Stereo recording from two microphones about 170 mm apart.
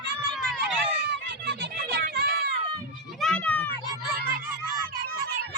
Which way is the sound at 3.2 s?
10° left (ahead or behind).